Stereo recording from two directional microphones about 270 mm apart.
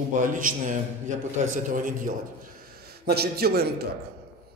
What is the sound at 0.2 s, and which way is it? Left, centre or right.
A man's voice, right.